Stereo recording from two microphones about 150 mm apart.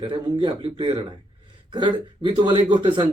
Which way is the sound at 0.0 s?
30° right (ahead or behind).